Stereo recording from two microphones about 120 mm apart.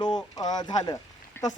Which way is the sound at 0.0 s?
35° left (ahead or behind).